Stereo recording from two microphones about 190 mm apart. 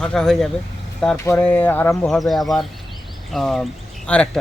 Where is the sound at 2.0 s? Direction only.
Centre (ahead or behind).